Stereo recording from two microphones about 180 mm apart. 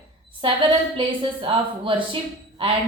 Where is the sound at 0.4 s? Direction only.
30° right (ahead or behind).